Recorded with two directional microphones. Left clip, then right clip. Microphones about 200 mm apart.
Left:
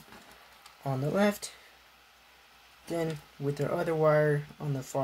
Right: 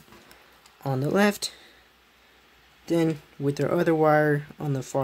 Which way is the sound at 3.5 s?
45° right (ahead or behind).